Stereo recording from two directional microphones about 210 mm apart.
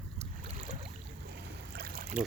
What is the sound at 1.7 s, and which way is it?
Boat, 45° right (ahead or behind).